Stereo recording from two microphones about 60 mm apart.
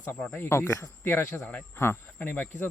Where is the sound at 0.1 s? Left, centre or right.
Left.